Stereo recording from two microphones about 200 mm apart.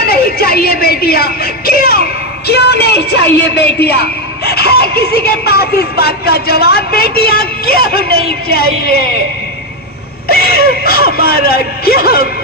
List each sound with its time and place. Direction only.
0.0 s a sound: 50° left (ahead or behind)
2.5 s a woman's voice: 55° left (ahead or behind)
10.2 s speech: 50° left (ahead or behind)